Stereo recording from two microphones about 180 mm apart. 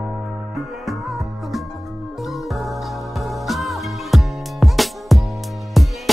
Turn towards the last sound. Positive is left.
turn(degrees=0)  # may be behind; listen again after turning